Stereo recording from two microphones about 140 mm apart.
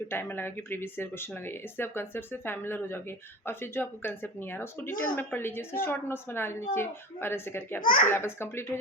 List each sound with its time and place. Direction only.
0.1 s speech: 15° left (ahead or behind)
7.8 s a child's voice: 75° left (ahead or behind)
8.0 s speech: 15° left (ahead or behind)